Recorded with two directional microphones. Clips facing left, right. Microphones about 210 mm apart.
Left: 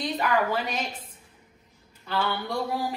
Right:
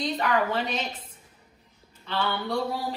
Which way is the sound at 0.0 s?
10° left (ahead or behind).